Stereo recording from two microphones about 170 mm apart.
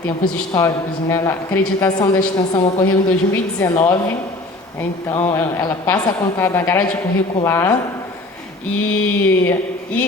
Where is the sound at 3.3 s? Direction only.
15° left (ahead or behind).